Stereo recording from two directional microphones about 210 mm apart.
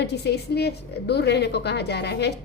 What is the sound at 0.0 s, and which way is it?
A woman's voice, 50° left (ahead or behind).